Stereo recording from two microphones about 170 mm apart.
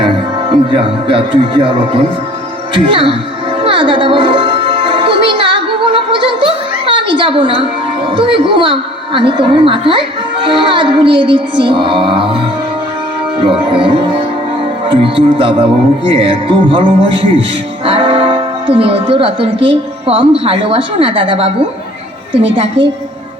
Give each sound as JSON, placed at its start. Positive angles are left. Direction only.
{"t": 0.5, "sound": "speech", "side_deg": -30}
{"t": 2.7, "sound": "music", "side_deg": -30}
{"t": 13.4, "sound": "music", "side_deg": -30}
{"t": 17.8, "sound": "speech", "side_deg": -30}
{"t": 22.8, "sound": "music", "side_deg": -35}